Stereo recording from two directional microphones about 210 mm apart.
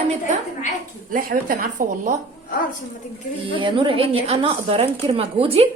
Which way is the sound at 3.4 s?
25° right (ahead or behind).